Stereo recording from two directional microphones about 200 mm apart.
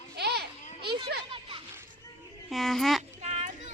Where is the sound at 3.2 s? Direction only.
35° right (ahead or behind).